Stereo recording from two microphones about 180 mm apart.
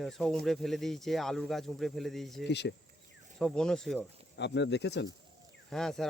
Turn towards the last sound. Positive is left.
turn(degrees=0)  # may be behind; listen again after turning